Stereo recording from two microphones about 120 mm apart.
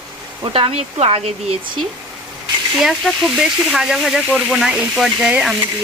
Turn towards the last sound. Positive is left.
turn(degrees=-5)  # may be behind; listen again after turning